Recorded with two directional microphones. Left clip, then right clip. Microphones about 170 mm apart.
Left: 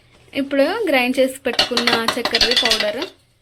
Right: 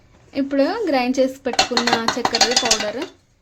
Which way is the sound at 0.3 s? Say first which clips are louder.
Left 2 dB; 5° right (ahead or behind).